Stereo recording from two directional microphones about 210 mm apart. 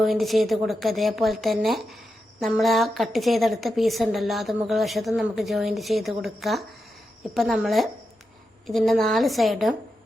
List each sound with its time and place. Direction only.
0.0 s a woman's voice: centre (ahead or behind)